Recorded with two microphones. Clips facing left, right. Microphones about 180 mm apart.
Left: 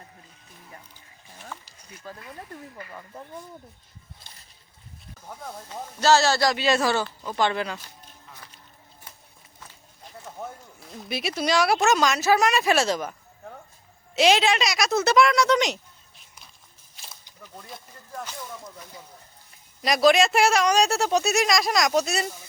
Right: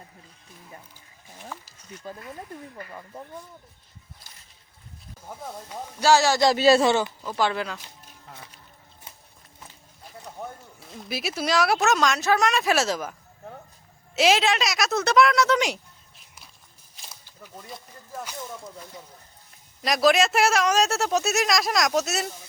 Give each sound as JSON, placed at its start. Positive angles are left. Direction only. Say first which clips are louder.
{"t": 1.4, "sound": "a sound", "louder": "right 1 dB", "side_deg": -10}
{"t": 2.0, "sound": "speech", "louder": "right 2 dB", "side_deg": -20}
{"t": 5.2, "sound": "speech", "louder": "right 1 dB", "side_deg": -5}
{"t": 6.5, "sound": "speech", "louder": "right 5 dB", "side_deg": -30}
{"t": 7.2, "sound": "speech", "louder": "left 1 dB", "side_deg": -5}
{"t": 10.2, "sound": "speech", "louder": "even", "side_deg": 0}
{"t": 19.8, "sound": "speech", "louder": "left 1 dB", "side_deg": 0}